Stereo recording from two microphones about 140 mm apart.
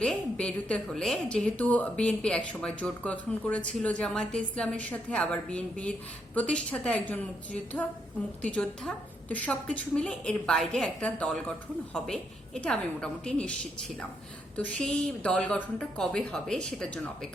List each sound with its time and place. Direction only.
0.0 s a woman's voice: 5° left (ahead or behind)